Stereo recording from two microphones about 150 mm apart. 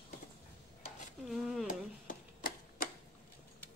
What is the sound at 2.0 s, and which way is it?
Typewriter, 70° left (ahead or behind).